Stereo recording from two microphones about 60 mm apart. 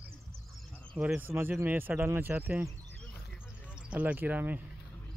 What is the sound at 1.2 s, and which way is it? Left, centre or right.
Speech, right.